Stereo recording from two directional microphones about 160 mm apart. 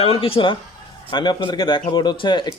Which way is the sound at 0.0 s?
35° left (ahead or behind).